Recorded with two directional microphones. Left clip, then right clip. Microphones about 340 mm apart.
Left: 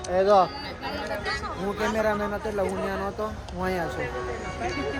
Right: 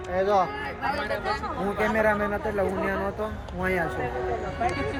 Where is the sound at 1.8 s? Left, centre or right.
Centre.